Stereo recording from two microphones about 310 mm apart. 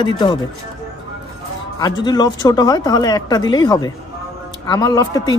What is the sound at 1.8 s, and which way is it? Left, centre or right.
A woman's voice, centre.